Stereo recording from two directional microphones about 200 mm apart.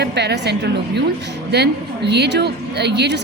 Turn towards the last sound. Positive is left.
turn(degrees=-55)  # may be behind; listen again after turning